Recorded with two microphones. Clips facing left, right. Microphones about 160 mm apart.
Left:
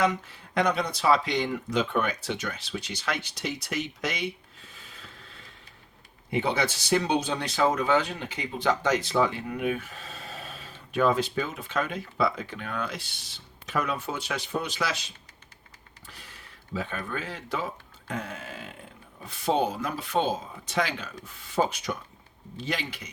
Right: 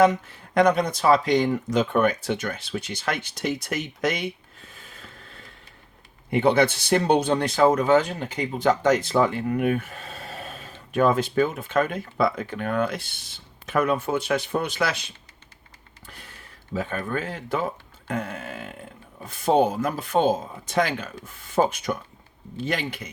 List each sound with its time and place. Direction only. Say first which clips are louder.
0.0 s speech: right 7 dB; 45° right (ahead or behind)
4.7 s a sound: right 3 dB; 50° right (ahead or behind)
6.3 s speech: right 7 dB; 55° right (ahead or behind)
16.7 s speech: right 5 dB; 45° right (ahead or behind)